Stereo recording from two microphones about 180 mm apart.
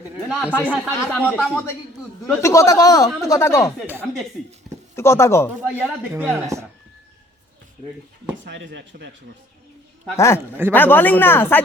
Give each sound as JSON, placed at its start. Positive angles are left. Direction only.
{"t": 0.3, "sound": "speech", "side_deg": -5}
{"t": 0.7, "sound": "a man's voice", "side_deg": 10}
{"t": 4.9, "sound": "speech", "side_deg": 15}
{"t": 6.3, "sound": "speech", "side_deg": -15}
{"t": 8.4, "sound": "speech", "side_deg": -80}
{"t": 10.2, "sound": "speech", "side_deg": 15}
{"t": 10.5, "sound": "speech", "side_deg": -10}
{"t": 10.8, "sound": "speech", "side_deg": 10}